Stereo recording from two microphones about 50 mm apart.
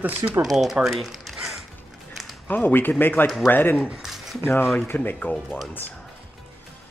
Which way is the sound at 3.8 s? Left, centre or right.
Centre.